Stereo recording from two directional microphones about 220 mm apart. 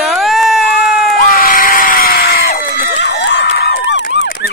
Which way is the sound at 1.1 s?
40° left (ahead or behind).